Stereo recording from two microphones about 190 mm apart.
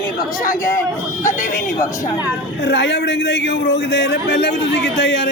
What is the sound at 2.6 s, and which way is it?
A man's voice, 70° left (ahead or behind).